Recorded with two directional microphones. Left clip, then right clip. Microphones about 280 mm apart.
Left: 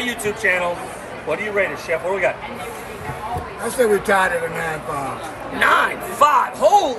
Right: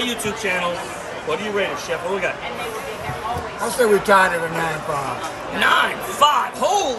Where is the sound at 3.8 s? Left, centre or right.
Centre.